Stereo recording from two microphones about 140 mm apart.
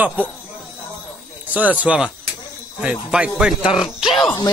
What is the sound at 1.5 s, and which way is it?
A man's voice, 10° right (ahead or behind).